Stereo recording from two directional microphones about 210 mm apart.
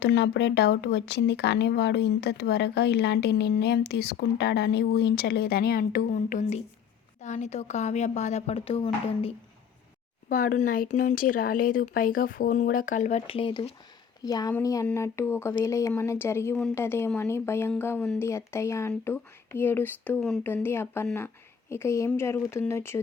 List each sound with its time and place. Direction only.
0.0 s speech: 50° left (ahead or behind); by 9.3 s 25° left (ahead or behind)
10.2 s speech: 40° left (ahead or behind); by 23.0 s 10° left (ahead or behind)